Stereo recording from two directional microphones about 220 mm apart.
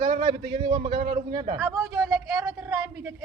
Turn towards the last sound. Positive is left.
turn(degrees=-15)  # may be behind; listen again after turning